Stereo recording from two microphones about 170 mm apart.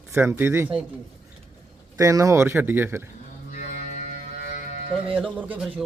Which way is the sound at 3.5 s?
50° left (ahead or behind).